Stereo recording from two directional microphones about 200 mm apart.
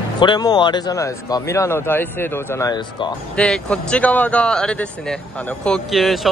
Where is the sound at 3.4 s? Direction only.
5° left (ahead or behind).